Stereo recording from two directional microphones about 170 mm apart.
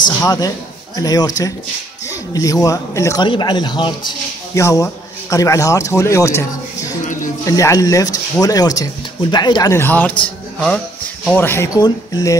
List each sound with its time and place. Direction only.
0.2 s speech: 20° left (ahead or behind)
11.3 s speech: 15° left (ahead or behind)